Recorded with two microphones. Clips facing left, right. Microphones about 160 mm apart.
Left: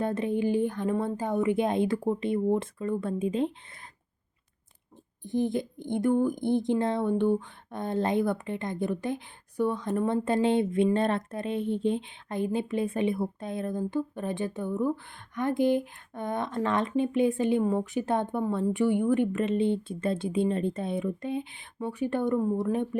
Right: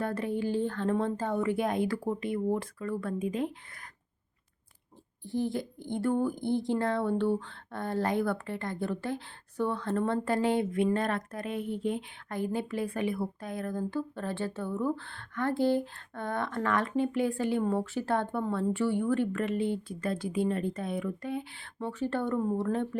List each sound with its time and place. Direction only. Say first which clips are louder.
0.0 s speech: left 4 dB; 20° left (ahead or behind)
5.2 s speech: left 4 dB; 20° left (ahead or behind)
10.2 s speech: left 3 dB; 25° left (ahead or behind)